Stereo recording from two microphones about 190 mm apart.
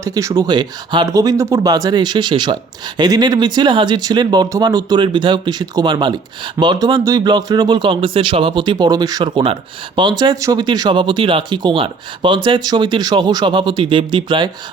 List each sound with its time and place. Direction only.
0.0 s speech: 15° right (ahead or behind)